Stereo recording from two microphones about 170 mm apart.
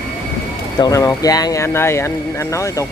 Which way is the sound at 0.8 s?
20° left (ahead or behind).